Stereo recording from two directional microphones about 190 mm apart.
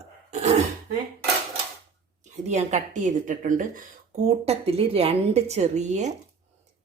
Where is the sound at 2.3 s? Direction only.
40° right (ahead or behind).